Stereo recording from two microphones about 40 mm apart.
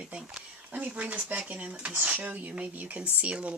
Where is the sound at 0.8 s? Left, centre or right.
Right.